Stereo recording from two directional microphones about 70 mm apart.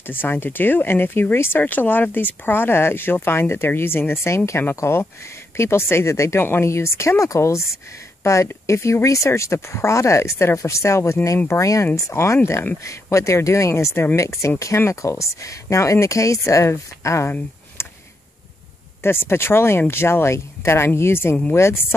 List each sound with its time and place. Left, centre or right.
0.0 s speech: left
19.0 s speech: left